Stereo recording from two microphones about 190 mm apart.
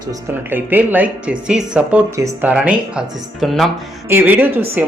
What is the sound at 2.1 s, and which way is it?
Speech, 15° right (ahead or behind).